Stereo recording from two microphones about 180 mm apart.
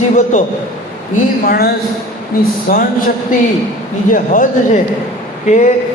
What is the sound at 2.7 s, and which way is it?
A man's voice, 50° left (ahead or behind).